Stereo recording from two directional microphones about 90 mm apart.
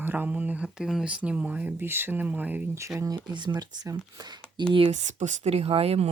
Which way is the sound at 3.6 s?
50° right (ahead or behind).